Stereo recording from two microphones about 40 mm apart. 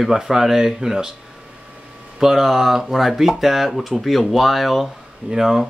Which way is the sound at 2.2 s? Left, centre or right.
Centre.